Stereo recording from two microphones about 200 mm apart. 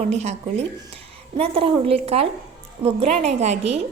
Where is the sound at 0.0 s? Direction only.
35° right (ahead or behind).